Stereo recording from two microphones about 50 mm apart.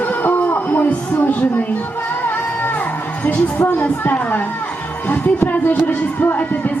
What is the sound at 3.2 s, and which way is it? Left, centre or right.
Music, left.